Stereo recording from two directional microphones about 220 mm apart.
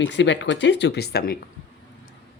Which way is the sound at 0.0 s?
55° left (ahead or behind).